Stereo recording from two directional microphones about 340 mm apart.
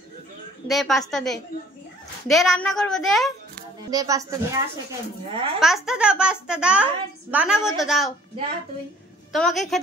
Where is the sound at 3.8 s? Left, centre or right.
Centre.